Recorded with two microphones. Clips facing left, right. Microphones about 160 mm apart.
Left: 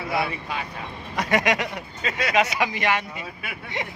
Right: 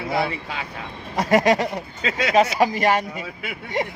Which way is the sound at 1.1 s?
35° right (ahead or behind).